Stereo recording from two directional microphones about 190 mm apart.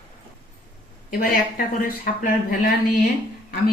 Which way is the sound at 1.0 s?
50° left (ahead or behind).